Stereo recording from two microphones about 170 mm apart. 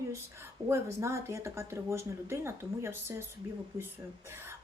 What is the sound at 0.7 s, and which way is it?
A woman's voice, 15° right (ahead or behind).